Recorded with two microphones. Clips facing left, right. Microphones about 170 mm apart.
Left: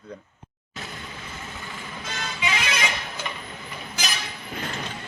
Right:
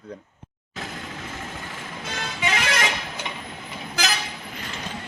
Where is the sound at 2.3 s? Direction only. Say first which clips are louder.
Right 3 dB; 50° right (ahead or behind).